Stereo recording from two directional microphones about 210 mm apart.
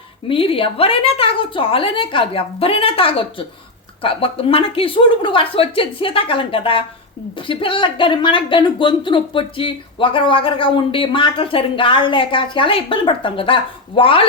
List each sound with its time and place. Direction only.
0.3 s speech: 25° left (ahead or behind)